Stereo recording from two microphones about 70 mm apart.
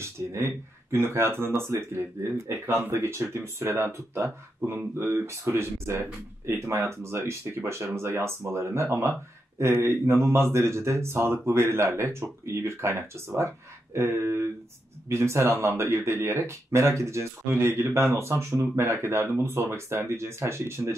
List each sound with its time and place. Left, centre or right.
0.0 s speech: right